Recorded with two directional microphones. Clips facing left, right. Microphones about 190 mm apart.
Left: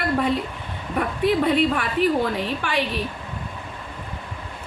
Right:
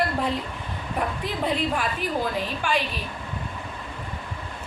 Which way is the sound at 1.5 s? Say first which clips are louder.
Left 5 dB; 65° left (ahead or behind).